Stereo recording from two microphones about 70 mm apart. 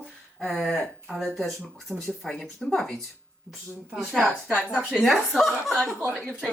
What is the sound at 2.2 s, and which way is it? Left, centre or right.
Speech, centre.